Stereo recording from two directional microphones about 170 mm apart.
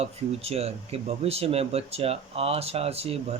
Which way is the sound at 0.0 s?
35° right (ahead or behind).